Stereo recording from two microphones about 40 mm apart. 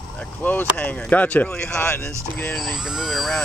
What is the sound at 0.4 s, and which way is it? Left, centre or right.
Speech, left.